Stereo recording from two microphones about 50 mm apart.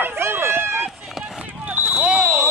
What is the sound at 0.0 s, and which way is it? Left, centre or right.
Run, right.